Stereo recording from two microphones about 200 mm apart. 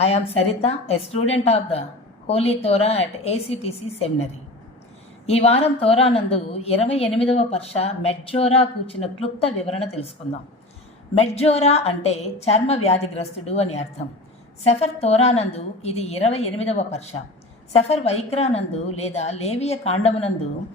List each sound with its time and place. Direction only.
0.0 s a woman's voice: 30° left (ahead or behind)
11.2 s a woman's voice: 30° left (ahead or behind)